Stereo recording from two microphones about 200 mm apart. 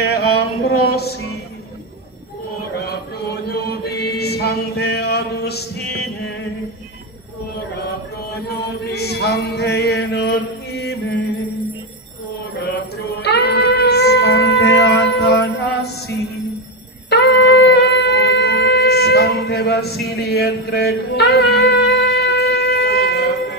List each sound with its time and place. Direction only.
0.0 s music: 50° left (ahead or behind)
3.4 s mantra: 55° left (ahead or behind)
8.9 s chant: 55° left (ahead or behind)
13.2 s music: 55° left (ahead or behind)
17.1 s shofar: 55° left (ahead or behind)